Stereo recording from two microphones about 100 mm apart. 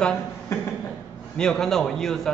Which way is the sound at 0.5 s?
25° left (ahead or behind).